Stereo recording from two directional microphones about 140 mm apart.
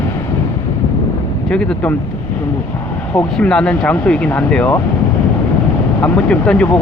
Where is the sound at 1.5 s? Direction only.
5° left (ahead or behind).